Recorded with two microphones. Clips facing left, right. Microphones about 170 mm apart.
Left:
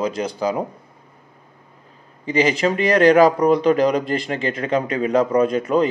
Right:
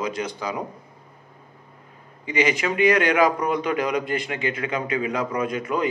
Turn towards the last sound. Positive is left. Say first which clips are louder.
# left 7 dB
turn(degrees=35)  # may be behind; listen again after turning